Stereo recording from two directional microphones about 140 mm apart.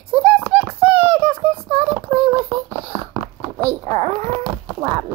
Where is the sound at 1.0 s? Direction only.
40° right (ahead or behind).